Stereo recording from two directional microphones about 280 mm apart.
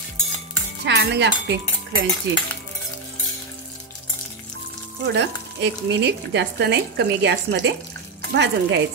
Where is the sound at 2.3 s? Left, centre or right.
Right.